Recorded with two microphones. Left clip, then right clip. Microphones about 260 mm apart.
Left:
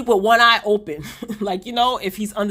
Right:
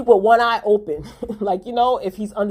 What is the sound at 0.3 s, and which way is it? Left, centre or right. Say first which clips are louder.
A man's voice: left 1 dB; left.